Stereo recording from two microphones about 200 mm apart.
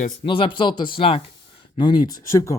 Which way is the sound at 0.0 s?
30° left (ahead or behind).